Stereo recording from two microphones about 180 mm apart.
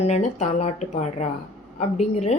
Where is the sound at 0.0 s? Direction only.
40° left (ahead or behind).